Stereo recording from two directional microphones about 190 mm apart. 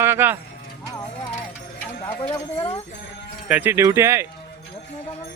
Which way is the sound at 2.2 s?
25° left (ahead or behind).